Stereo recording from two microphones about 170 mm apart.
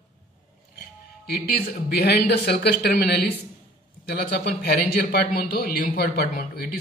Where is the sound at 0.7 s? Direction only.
65° left (ahead or behind).